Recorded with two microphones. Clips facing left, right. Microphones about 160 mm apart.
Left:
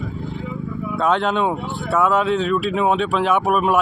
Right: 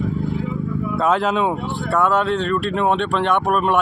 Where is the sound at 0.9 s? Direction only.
Centre (ahead or behind).